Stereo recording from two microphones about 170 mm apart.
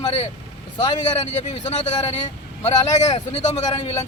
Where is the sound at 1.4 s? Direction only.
45° left (ahead or behind).